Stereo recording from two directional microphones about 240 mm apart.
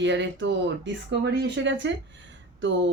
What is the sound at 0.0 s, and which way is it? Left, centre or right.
Speech, right.